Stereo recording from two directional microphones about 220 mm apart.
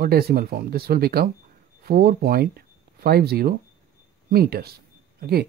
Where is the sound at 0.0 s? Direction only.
45° right (ahead or behind).